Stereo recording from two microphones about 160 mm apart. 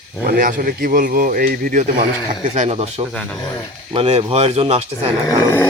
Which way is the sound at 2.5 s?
40° right (ahead or behind).